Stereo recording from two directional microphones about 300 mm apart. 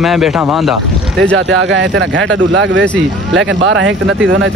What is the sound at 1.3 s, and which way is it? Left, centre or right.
Speech, right.